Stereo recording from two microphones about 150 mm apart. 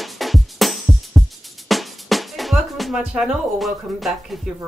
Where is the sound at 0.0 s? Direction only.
Centre (ahead or behind).